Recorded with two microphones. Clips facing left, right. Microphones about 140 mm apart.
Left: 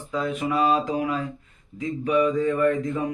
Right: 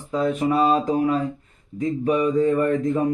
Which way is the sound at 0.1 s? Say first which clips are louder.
Right 5 dB; 35° right (ahead or behind).